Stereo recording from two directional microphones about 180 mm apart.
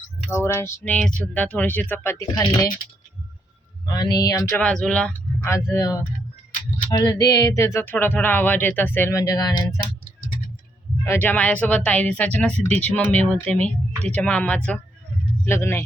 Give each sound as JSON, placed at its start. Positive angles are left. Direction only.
{"t": 0.3, "sound": "speech", "side_deg": 15}
{"t": 3.8, "sound": "speech", "side_deg": 20}
{"t": 5.4, "sound": "speech", "side_deg": 15}
{"t": 11.0, "sound": "speech", "side_deg": 10}